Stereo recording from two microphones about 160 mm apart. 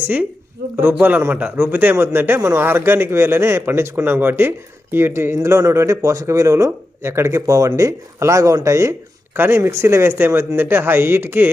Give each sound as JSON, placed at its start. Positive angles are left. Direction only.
{"t": 0.0, "sound": "a woman's voice", "side_deg": -10}